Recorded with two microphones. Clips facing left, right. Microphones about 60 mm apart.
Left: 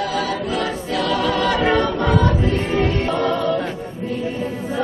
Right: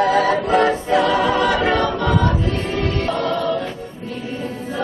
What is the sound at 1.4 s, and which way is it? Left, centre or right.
Choir, centre.